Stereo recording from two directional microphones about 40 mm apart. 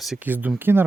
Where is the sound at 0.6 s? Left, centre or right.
Right.